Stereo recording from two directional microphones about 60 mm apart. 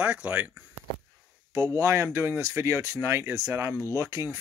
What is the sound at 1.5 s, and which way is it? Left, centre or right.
Speech, right.